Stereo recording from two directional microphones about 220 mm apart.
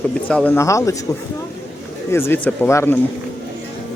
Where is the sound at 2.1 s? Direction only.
10° left (ahead or behind).